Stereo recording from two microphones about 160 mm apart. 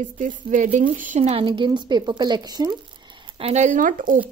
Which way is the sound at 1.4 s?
30° right (ahead or behind).